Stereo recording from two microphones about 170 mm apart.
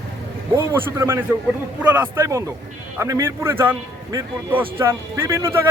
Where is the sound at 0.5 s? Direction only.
15° right (ahead or behind).